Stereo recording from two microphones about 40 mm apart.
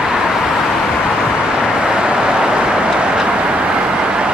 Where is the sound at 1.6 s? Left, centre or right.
Centre.